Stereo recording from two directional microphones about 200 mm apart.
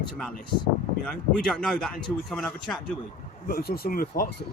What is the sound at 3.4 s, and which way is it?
Speech, 50° left (ahead or behind).